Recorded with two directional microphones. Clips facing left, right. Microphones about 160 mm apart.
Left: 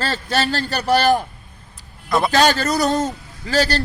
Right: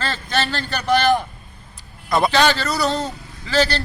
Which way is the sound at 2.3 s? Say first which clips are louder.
Left 2 dB; 45° left (ahead or behind).